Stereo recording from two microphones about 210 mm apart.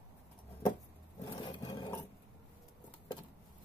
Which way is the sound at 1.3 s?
20° left (ahead or behind).